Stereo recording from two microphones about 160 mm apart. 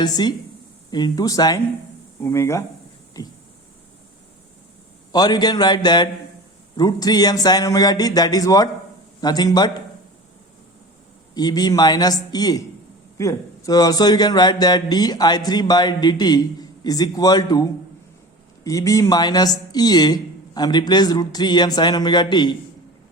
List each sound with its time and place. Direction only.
0.0 s a man's voice: 25° left (ahead or behind)
5.1 s a man's voice: 25° left (ahead or behind)
11.3 s a man's voice: 25° left (ahead or behind)